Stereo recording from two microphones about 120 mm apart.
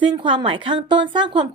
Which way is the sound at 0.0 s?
45° right (ahead or behind).